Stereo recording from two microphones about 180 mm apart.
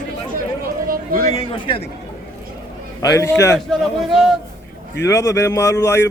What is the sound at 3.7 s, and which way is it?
Speech, centre (ahead or behind).